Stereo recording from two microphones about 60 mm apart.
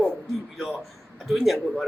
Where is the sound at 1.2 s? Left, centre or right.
Centre.